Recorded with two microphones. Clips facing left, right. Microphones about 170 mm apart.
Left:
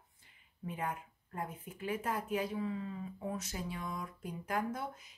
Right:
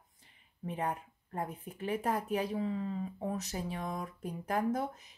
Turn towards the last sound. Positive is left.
turn(degrees=-35)  # may be behind; listen again after turning